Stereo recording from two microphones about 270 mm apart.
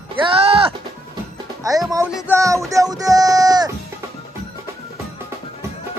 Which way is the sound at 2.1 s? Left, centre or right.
Centre.